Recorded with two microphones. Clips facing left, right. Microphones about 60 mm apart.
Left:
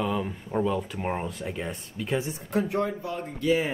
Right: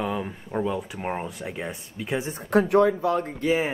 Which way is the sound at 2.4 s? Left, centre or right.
Right.